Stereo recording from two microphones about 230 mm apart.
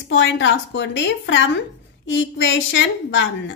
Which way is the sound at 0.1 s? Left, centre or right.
Left.